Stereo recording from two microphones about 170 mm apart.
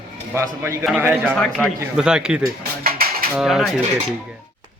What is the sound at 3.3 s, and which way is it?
Speech, centre (ahead or behind).